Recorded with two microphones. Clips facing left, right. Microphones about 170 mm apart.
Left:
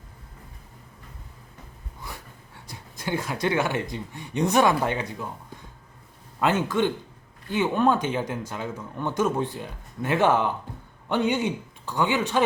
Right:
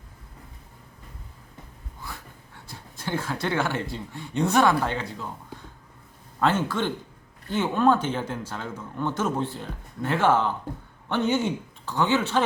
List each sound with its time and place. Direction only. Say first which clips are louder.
2.6 s speech: left 2 dB; 15° left (ahead or behind)
6.4 s speech: left 1 dB; 15° left (ahead or behind)